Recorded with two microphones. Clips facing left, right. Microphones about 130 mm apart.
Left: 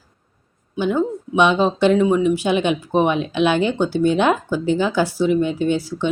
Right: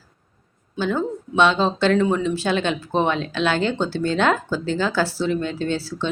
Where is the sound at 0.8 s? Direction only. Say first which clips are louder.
Left 3 dB; 15° left (ahead or behind).